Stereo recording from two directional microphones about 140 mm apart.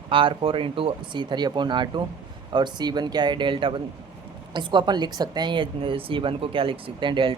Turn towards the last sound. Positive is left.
turn(degrees=-35)  # may be behind; listen again after turning